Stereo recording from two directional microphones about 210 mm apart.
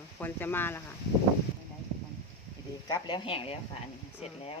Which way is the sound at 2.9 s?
20° left (ahead or behind).